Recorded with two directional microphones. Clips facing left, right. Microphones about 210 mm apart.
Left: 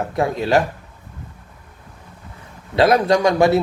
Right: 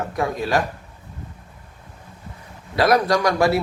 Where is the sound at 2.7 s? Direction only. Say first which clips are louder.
Left 3 dB; 25° left (ahead or behind).